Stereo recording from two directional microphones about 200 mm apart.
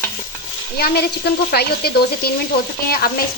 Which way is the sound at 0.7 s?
50° left (ahead or behind).